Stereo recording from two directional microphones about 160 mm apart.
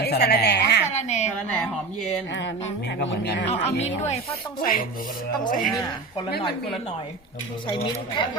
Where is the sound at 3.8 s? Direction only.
45° left (ahead or behind).